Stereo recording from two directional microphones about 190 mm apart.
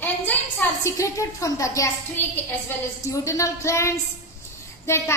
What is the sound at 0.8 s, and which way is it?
A woman's voice, 15° left (ahead or behind).